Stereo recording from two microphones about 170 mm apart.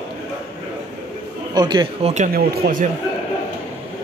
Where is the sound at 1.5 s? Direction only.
25° right (ahead or behind).